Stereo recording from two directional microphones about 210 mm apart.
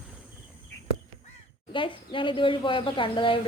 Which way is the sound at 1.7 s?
25° left (ahead or behind).